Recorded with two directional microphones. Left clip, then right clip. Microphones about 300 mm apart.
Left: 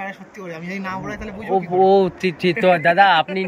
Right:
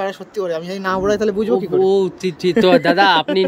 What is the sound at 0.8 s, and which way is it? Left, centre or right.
Speech, centre.